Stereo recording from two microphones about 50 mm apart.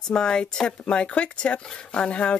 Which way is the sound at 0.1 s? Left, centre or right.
Centre.